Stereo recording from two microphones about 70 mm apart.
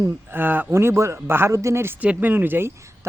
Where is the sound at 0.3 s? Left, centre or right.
Right.